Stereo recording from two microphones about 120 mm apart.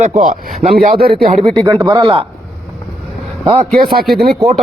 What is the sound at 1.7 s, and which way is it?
Speech, 30° right (ahead or behind).